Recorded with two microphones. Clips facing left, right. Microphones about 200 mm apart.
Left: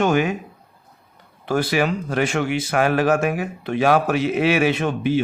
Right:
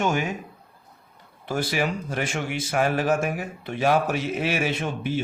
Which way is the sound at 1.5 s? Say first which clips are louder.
Left 6 dB; 70° left (ahead or behind).